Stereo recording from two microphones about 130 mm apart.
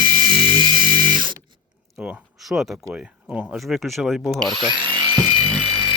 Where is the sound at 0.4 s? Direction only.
40° right (ahead or behind).